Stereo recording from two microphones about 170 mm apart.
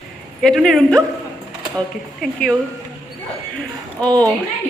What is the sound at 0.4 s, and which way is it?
Speech, 5° left (ahead or behind).